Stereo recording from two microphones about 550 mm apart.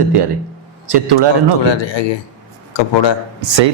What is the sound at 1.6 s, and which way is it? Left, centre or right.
Speech, left.